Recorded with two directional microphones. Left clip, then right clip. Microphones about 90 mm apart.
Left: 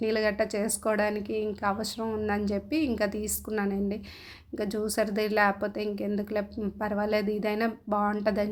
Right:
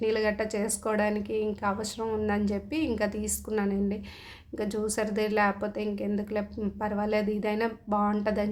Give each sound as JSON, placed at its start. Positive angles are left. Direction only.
{"t": 0.0, "sound": "a woman's voice", "side_deg": 35}